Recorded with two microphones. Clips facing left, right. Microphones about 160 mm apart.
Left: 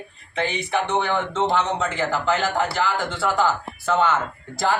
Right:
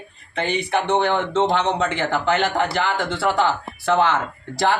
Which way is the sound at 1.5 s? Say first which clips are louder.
Right 2 dB; 65° right (ahead or behind).